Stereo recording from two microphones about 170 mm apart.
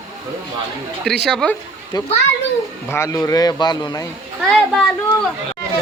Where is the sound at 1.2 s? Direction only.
Centre (ahead or behind).